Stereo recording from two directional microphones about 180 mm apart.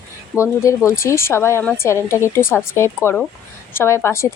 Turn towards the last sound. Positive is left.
turn(degrees=15)  # may be behind; listen again after turning